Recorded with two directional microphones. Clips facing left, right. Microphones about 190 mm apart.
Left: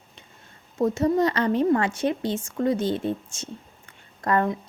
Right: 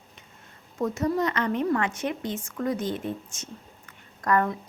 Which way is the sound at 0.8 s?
30° left (ahead or behind).